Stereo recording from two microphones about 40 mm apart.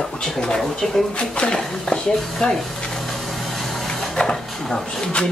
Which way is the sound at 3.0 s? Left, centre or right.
Centre.